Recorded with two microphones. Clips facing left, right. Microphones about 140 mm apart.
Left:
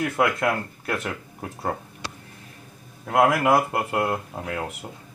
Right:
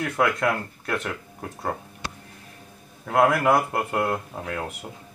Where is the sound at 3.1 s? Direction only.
5° left (ahead or behind).